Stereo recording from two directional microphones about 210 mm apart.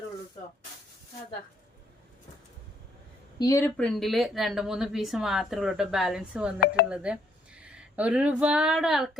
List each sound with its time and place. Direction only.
3.3 s speech: 15° left (ahead or behind)
3.8 s speech: centre (ahead or behind)